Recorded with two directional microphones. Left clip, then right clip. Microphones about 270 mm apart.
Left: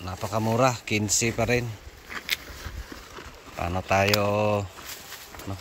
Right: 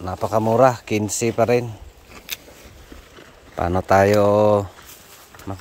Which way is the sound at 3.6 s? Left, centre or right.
Right.